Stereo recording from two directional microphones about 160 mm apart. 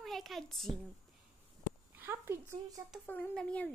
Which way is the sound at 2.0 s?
15° right (ahead or behind).